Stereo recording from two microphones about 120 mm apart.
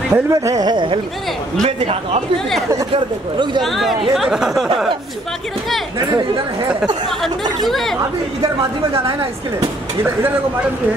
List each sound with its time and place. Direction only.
0.1 s speech: 30° right (ahead or behind)
1.6 s a man's voice: 65° right (ahead or behind)
2.9 s speech: 40° right (ahead or behind)
3.6 s speech: centre (ahead or behind)
5.9 s speech: 30° right (ahead or behind)
7.6 s speech: centre (ahead or behind)